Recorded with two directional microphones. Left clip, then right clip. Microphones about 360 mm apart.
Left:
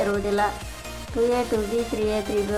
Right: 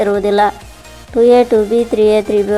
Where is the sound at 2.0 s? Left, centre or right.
Centre.